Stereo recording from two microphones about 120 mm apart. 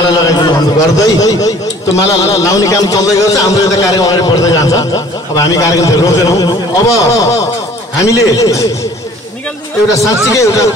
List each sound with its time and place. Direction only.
0.1 s a man's voice: 35° left (ahead or behind)
9.8 s a man's voice: 25° left (ahead or behind)